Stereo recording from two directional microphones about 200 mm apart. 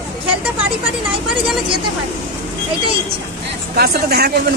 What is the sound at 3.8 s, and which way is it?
Speech, 50° right (ahead or behind).